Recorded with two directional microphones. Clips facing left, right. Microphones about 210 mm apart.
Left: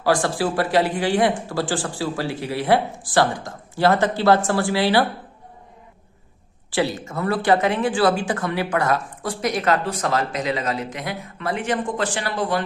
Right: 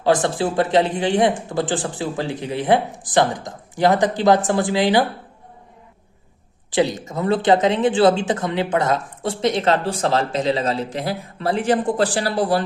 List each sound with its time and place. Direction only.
0.0 s speech: 20° right (ahead or behind)
6.7 s speech: 20° right (ahead or behind); by 12.6 s 35° right (ahead or behind)